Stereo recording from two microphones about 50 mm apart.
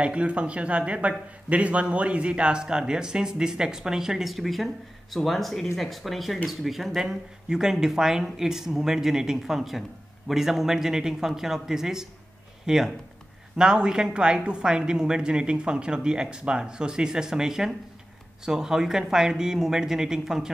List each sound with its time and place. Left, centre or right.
0.0 s speech: right